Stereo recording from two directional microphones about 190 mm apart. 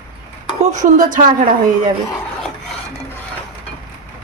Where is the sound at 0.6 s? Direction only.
40° right (ahead or behind).